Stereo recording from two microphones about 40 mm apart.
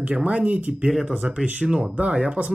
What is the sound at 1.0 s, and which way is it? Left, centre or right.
Speech, right.